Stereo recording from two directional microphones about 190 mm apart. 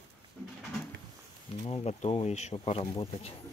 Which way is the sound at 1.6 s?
30° left (ahead or behind).